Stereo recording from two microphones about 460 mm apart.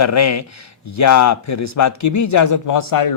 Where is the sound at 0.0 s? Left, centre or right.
Left.